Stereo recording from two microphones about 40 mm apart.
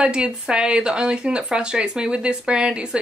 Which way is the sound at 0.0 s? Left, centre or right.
Right.